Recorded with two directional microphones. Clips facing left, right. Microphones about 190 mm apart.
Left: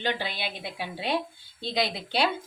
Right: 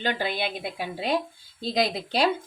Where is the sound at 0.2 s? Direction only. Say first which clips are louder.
Right 5 dB; 50° right (ahead or behind).